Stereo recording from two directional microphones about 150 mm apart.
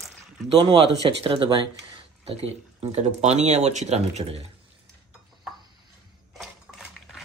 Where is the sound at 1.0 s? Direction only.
35° right (ahead or behind).